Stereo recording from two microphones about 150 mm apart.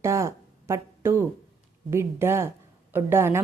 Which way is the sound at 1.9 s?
15° right (ahead or behind).